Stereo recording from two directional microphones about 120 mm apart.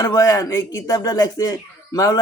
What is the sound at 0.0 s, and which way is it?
Speech, 25° left (ahead or behind).